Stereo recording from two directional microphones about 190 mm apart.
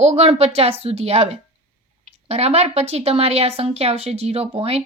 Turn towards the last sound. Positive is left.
turn(degrees=-30)  # may be behind; listen again after turning